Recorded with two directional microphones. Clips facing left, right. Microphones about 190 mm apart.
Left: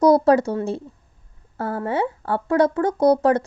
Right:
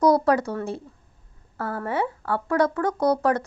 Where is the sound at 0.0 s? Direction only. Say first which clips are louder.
Left 4 dB; 25° left (ahead or behind).